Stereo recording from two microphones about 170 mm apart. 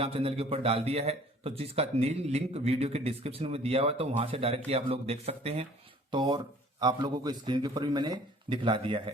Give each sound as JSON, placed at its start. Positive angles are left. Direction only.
{"t": 0.0, "sound": "a man's voice", "side_deg": -35}